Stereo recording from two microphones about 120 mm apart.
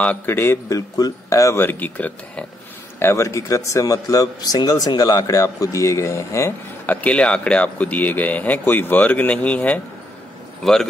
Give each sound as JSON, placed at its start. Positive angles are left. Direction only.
{"t": 0.0, "sound": "speech", "side_deg": 15}
{"t": 7.0, "sound": "a man's voice", "side_deg": 10}